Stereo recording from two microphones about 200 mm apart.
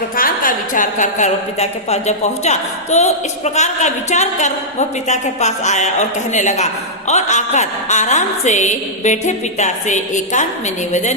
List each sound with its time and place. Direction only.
0.2 s a woman's voice: 40° left (ahead or behind)